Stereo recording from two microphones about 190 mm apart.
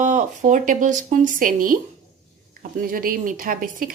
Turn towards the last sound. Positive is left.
turn(degrees=-45)  # may be behind; listen again after turning